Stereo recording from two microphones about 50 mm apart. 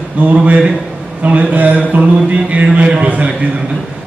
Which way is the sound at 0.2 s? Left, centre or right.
Right.